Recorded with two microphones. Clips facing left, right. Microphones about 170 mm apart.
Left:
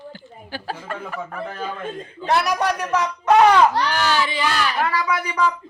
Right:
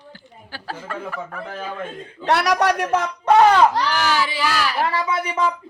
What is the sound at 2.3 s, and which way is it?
Speech, 75° right (ahead or behind).